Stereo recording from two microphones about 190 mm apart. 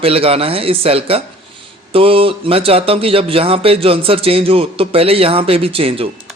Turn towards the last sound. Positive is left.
turn(degrees=-30)  # may be behind; listen again after turning